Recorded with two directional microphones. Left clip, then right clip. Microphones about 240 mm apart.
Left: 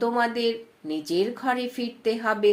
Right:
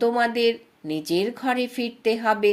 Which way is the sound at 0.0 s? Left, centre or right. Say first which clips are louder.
Right 3 dB; right.